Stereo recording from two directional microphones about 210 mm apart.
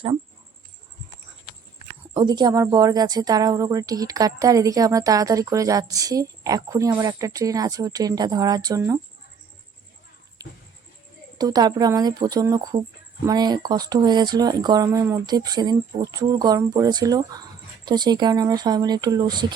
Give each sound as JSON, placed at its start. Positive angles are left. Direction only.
{"t": 2.1, "sound": "speech", "side_deg": -20}
{"t": 11.3, "sound": "speech", "side_deg": -20}